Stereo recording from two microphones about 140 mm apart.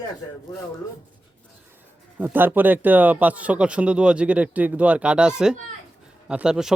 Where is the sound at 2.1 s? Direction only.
15° right (ahead or behind).